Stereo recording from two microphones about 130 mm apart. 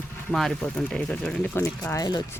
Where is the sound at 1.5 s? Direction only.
20° left (ahead or behind).